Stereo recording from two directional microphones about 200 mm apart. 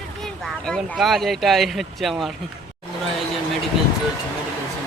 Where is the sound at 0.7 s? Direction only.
Centre (ahead or behind).